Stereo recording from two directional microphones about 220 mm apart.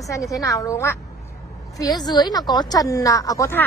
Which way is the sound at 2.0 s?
20° left (ahead or behind).